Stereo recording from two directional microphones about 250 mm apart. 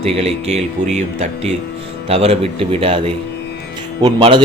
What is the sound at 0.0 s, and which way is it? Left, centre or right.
A man's voice, right.